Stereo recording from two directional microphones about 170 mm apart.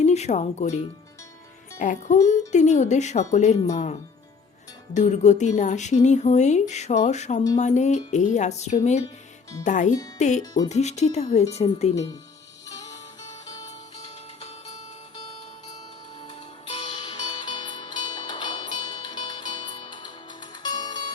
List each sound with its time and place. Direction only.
0.0 s speech: 40° left (ahead or behind)
4.9 s speech: 45° left (ahead or behind)
10.4 s speech: 20° left (ahead or behind)
10.7 s speech: 40° left (ahead or behind)
12.6 s music: 20° left (ahead or behind)
16.2 s music: 35° left (ahead or behind)